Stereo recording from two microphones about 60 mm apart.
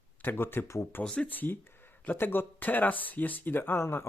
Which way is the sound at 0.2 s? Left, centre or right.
Left.